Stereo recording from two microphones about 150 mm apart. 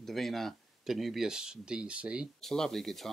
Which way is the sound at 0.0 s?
Centre (ahead or behind).